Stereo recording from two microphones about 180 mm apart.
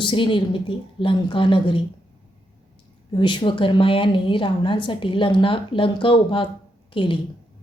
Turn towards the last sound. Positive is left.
turn(degrees=25)  # may be behind; listen again after turning